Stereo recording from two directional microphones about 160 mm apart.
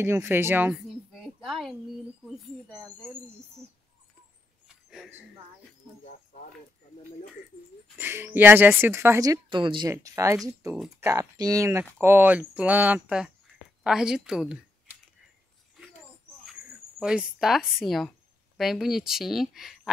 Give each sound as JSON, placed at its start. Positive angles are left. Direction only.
{"t": 0.0, "sound": "speech", "side_deg": -15}
{"t": 0.8, "sound": "a sound", "side_deg": -5}
{"t": 8.0, "sound": "speech", "side_deg": -15}
{"t": 17.0, "sound": "speech", "side_deg": -5}